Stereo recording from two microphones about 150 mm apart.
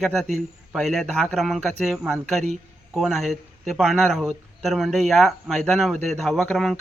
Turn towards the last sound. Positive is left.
turn(degrees=0)  # may be behind; listen again after turning